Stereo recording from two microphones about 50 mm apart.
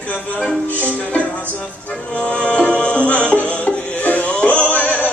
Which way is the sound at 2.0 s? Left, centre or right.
Centre.